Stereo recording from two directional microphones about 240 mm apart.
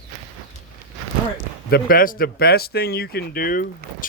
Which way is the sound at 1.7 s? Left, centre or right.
Left.